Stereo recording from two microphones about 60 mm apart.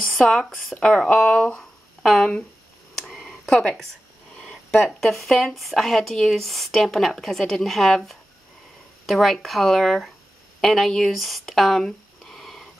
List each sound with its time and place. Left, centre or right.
0.7 s speech: centre
1.6 s a sound: centre
4.8 s speech: centre